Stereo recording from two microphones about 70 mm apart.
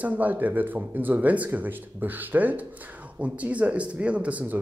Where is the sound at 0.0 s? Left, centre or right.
Right.